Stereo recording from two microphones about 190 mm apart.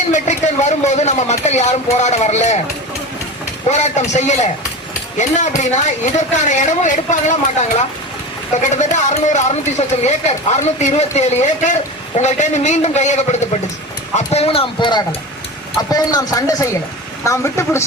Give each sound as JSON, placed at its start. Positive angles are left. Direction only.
{"t": 0.1, "sound": "speech", "side_deg": 40}
{"t": 3.7, "sound": "speech", "side_deg": 35}
{"t": 8.5, "sound": "speech", "side_deg": 40}